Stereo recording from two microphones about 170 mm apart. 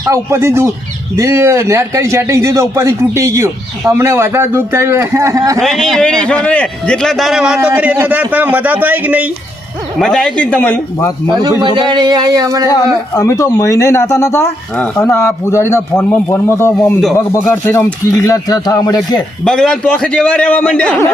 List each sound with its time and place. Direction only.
0.1 s a man's voice: 15° right (ahead or behind)
5.5 s a man's voice: centre (ahead or behind)
10.0 s speech: 5° left (ahead or behind)
11.3 s speech: 25° right (ahead or behind)
13.1 s speech: 20° left (ahead or behind)
19.5 s speech: 5° left (ahead or behind)